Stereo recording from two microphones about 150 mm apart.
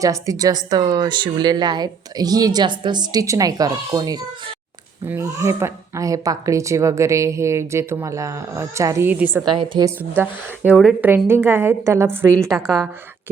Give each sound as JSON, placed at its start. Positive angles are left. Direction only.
{"t": 0.0, "sound": "a woman's voice", "side_deg": -20}
{"t": 9.4, "sound": "a woman's voice", "side_deg": -30}
{"t": 10.0, "sound": "a woman's voice", "side_deg": -10}
{"t": 12.5, "sound": "a woman's voice", "side_deg": 0}